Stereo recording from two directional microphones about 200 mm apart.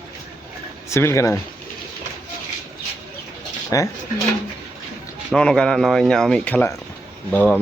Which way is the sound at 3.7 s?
15° left (ahead or behind).